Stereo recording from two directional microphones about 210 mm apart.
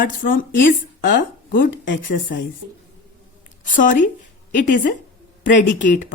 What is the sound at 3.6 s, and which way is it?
Speech, 40° left (ahead or behind).